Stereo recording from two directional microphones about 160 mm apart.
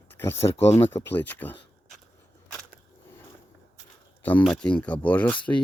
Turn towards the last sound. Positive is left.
turn(degrees=10)  # may be behind; listen again after turning